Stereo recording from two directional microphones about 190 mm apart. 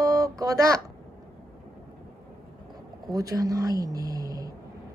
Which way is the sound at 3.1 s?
20° right (ahead or behind).